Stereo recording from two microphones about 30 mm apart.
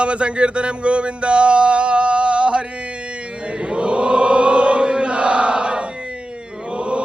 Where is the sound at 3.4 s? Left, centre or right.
Right.